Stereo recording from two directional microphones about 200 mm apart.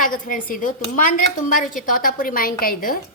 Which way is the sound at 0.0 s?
40° left (ahead or behind).